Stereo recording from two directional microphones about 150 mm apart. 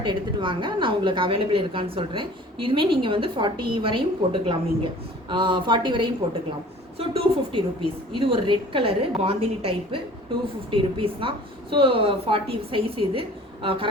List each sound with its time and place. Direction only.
0.0 s a woman's voice: 30° right (ahead or behind)